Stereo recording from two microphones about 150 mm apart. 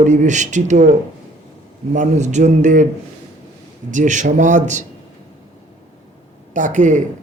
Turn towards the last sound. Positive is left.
turn(degrees=-55)  # may be behind; listen again after turning